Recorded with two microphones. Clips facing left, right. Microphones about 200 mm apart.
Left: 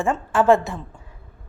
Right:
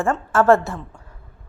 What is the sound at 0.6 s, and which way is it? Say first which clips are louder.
Speech: right 1 dB; centre (ahead or behind).